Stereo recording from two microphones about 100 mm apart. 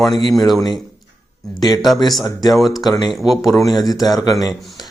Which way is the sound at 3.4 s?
30° left (ahead or behind).